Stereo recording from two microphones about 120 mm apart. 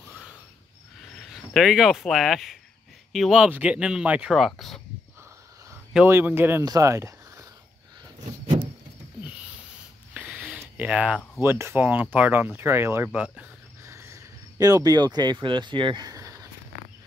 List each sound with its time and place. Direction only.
1.1 s speech: centre (ahead or behind)
6.0 s speech: 20° right (ahead or behind)
6.6 s speech: 30° right (ahead or behind)
10.1 s a sound: 10° right (ahead or behind)
11.4 s speech: 20° right (ahead or behind)
13.8 s cricket: 25° right (ahead or behind)